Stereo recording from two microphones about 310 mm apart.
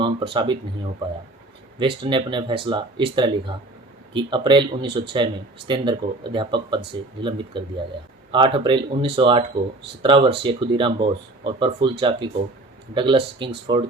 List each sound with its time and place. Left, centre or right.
0.0 s speech: centre
1.8 s speech: centre